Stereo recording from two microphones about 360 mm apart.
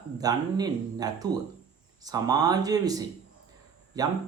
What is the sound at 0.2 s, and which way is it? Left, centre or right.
Speech, centre.